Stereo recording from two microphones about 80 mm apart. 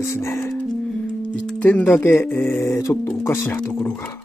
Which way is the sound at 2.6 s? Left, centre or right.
Left.